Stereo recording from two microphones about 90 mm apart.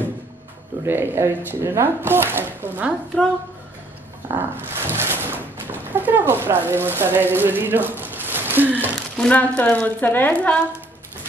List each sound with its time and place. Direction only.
0.8 s speech: 25° right (ahead or behind)
4.4 s speech: 25° right (ahead or behind)
9.2 s speech: 15° left (ahead or behind)